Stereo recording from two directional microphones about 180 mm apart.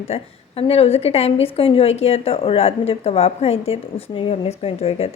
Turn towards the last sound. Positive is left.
turn(degrees=35)  # may be behind; listen again after turning